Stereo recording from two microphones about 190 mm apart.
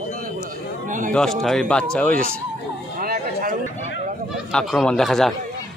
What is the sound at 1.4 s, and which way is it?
Speech, 5° left (ahead or behind).